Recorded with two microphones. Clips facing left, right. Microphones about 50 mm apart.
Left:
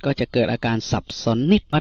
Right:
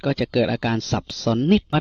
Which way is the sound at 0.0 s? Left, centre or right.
Left.